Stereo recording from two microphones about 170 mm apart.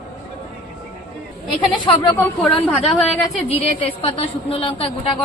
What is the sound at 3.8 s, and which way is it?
A woman's voice, 35° left (ahead or behind).